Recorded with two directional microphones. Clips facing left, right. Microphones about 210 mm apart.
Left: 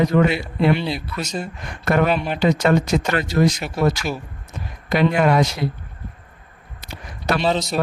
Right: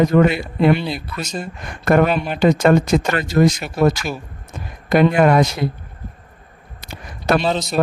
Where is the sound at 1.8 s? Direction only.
50° right (ahead or behind).